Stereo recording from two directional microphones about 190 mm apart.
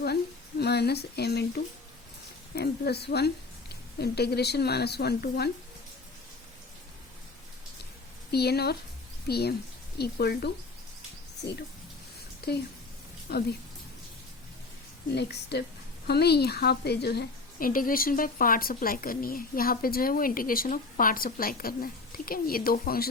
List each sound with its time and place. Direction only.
0.6 s a woman's voice: 60° left (ahead or behind)
8.3 s speech: 60° left (ahead or behind)
15.1 s a woman's voice: 60° left (ahead or behind)